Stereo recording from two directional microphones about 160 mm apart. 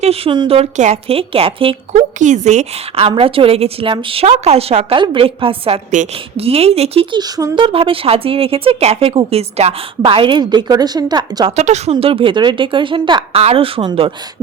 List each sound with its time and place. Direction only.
0.0 s speech: 35° right (ahead or behind)
2.1 s speech: 50° right (ahead or behind); by 11.5 s 25° right (ahead or behind)
11.5 s speech: 45° right (ahead or behind)